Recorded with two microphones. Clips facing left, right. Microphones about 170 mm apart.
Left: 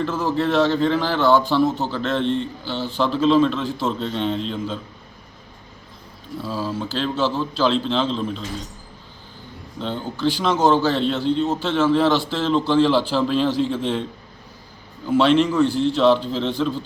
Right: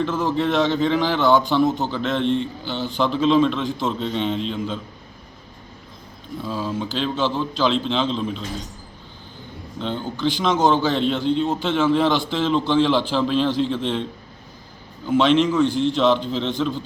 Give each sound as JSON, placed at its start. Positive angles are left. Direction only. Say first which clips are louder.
{"t": 0.0, "sound": "a man's voice", "louder": "even", "side_deg": 5}
{"t": 6.4, "sound": "a man's voice", "louder": "even", "side_deg": 5}
{"t": 9.8, "sound": "a man's voice", "louder": "left 1 dB", "side_deg": 5}
{"t": 15.2, "sound": "a man's voice", "louder": "left 1 dB", "side_deg": 5}